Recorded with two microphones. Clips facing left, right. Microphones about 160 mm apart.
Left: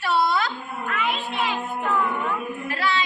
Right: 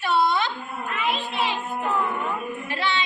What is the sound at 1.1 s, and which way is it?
Child singing, 30° right (ahead or behind).